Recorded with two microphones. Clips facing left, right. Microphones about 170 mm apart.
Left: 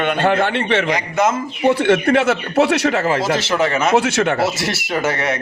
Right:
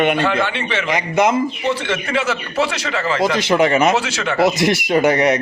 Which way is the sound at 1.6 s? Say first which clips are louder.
Left 7 dB; 55° left (ahead or behind).